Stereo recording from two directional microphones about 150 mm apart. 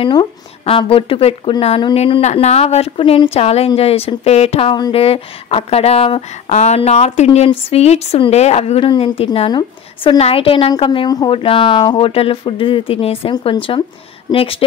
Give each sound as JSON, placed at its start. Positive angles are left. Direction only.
{"t": 0.0, "sound": "a woman's voice", "side_deg": 35}